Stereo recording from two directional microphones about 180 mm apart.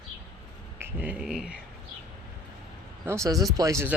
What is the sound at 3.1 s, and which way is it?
Speech, 15° right (ahead or behind).